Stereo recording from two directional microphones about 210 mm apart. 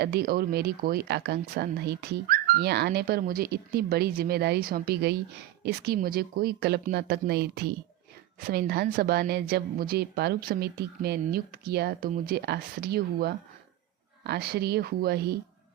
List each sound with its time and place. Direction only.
0.0 s speech: 50° right (ahead or behind)